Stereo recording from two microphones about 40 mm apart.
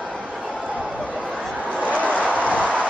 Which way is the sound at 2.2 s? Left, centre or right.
Right.